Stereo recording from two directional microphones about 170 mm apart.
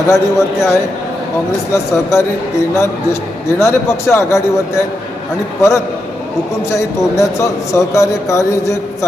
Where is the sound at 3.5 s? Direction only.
15° left (ahead or behind).